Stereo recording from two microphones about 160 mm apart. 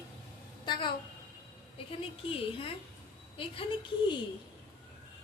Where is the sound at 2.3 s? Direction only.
35° left (ahead or behind).